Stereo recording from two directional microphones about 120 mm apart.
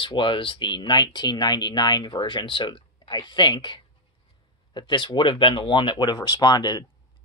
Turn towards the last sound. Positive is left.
turn(degrees=35)  # may be behind; listen again after turning